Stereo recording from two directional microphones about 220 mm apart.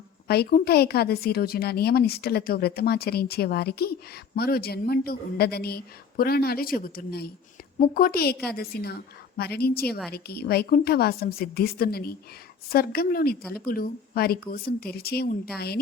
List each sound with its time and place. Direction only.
0.3 s a woman's voice: 45° left (ahead or behind)